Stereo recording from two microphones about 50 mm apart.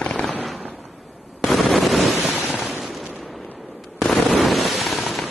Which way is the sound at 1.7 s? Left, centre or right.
Centre.